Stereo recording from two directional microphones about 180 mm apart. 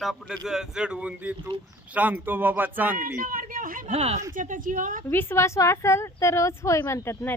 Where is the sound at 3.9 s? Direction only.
35° right (ahead or behind).